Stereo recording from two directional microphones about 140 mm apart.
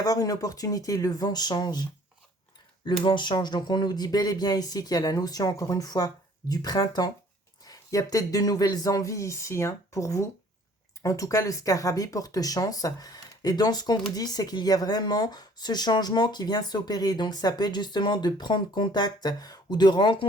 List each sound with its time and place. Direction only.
0.0 s speech: 25° left (ahead or behind)
2.8 s speech: 35° left (ahead or behind)